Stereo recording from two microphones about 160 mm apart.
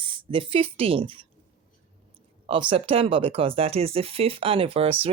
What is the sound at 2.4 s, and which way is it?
Speech, 35° right (ahead or behind).